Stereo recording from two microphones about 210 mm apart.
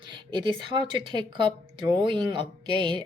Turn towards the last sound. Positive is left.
turn(degrees=-20)  # may be behind; listen again after turning